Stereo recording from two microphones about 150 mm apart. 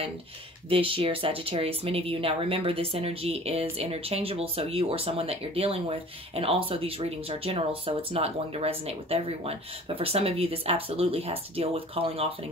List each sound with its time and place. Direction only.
0.7 s speech: 35° right (ahead or behind)